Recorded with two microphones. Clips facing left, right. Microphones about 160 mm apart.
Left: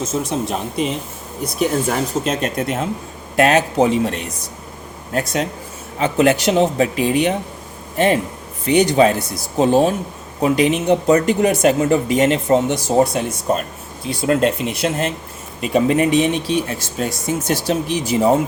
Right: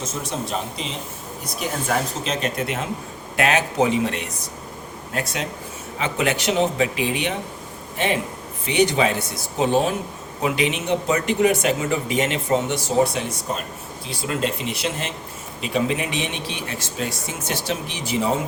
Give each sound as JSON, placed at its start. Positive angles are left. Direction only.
{"t": 0.0, "sound": "speech", "side_deg": 50}
{"t": 2.2, "sound": "speech", "side_deg": 45}